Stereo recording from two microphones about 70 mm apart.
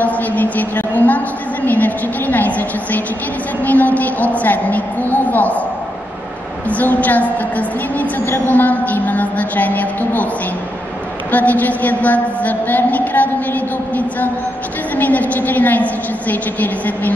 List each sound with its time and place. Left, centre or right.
0.0 s a sound: left
1.7 s a woman's voice: left
6.7 s a woman's voice: left
11.3 s a woman's voice: left